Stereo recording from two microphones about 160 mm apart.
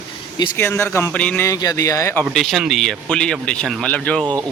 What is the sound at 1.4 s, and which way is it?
Speech, 20° left (ahead or behind).